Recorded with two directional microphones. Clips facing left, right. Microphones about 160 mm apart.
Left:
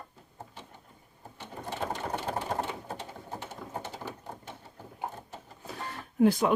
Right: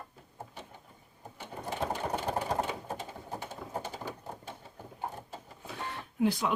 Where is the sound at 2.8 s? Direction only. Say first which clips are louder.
Right 1 dB; 15° right (ahead or behind).